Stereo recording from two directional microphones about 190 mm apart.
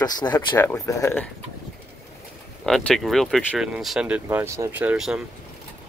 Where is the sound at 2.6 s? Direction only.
Centre (ahead or behind).